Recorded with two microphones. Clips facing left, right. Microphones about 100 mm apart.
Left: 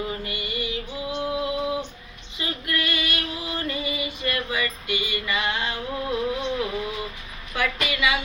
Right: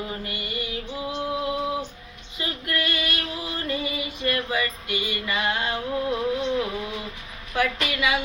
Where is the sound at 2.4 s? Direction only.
40° right (ahead or behind).